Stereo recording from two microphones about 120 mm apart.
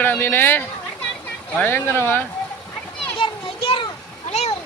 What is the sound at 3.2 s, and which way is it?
Children playing, 45° left (ahead or behind).